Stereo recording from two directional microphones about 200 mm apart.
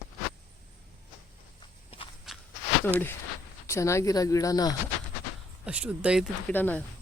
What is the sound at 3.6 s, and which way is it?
Speech, 15° left (ahead or behind).